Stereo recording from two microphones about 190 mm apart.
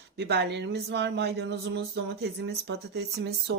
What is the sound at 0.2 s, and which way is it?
Speech, 60° right (ahead or behind).